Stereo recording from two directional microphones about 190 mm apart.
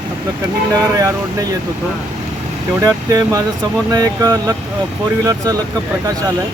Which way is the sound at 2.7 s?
15° right (ahead or behind).